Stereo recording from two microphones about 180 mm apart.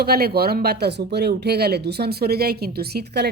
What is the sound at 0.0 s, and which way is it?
Speech, 60° right (ahead or behind).